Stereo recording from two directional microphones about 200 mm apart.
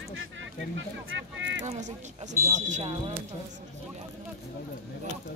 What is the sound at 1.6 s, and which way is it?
Speech, 35° right (ahead or behind).